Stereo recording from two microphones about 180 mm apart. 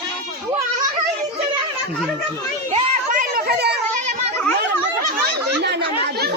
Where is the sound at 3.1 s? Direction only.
60° right (ahead or behind).